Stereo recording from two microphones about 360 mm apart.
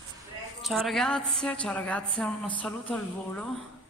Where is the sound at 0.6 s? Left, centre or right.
Centre.